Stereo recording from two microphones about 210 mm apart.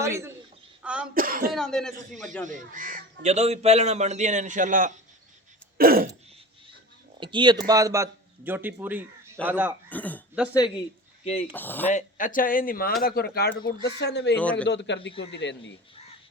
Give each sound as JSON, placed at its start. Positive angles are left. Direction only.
{"t": 0.0, "sound": "a man's voice", "side_deg": -15}
{"t": 0.8, "sound": "cough", "side_deg": -5}
{"t": 1.1, "sound": "speech", "side_deg": -45}
{"t": 1.5, "sound": "speech", "side_deg": 0}
{"t": 2.5, "sound": "speech", "side_deg": -40}
{"t": 5.7, "sound": "throat clearing", "side_deg": -45}
{"t": 7.2, "sound": "a man's voice", "side_deg": -20}
{"t": 9.9, "sound": "speech", "side_deg": 5}
{"t": 11.2, "sound": "speech", "side_deg": 30}
{"t": 11.5, "sound": "speech", "side_deg": 10}
{"t": 11.9, "sound": "a man's voice", "side_deg": 35}